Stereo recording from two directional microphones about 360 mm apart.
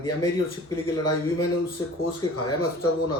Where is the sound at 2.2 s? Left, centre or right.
Centre.